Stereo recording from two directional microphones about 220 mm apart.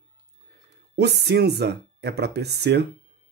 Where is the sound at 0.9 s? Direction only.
50° right (ahead or behind).